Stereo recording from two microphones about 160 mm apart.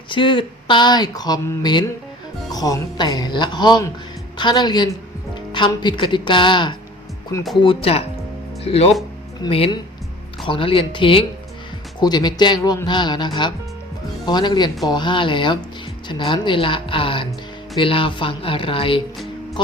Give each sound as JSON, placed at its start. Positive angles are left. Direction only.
{"t": 0.1, "sound": "speech", "side_deg": 30}
{"t": 19.1, "sound": "music", "side_deg": 0}